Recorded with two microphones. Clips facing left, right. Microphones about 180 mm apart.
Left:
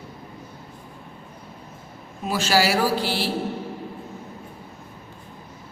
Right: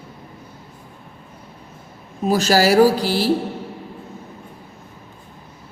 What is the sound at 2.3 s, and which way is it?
Speech, 40° right (ahead or behind).